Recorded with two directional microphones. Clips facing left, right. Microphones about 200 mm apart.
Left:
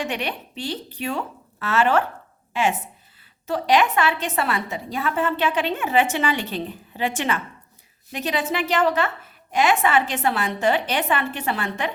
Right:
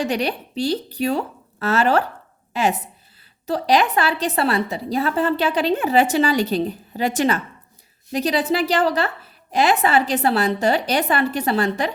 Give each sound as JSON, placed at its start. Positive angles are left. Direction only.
{"t": 0.0, "sound": "a woman's voice", "side_deg": -35}